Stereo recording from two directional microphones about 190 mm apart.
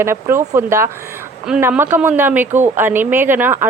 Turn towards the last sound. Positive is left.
turn(degrees=-10)  # may be behind; listen again after turning